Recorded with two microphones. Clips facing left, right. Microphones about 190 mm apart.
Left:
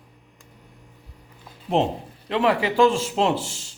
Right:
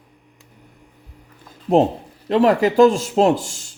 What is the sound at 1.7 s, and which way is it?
A man's voice, 45° right (ahead or behind).